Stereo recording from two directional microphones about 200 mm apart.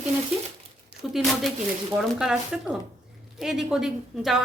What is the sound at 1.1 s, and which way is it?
A woman's voice, centre (ahead or behind).